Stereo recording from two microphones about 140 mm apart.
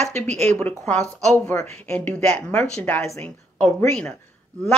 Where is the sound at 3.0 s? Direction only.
20° left (ahead or behind).